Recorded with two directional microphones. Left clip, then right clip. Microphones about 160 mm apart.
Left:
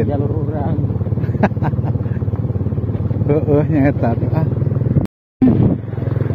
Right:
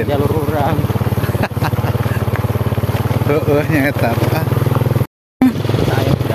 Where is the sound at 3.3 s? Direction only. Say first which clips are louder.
Right 1 dB; 20° left (ahead or behind).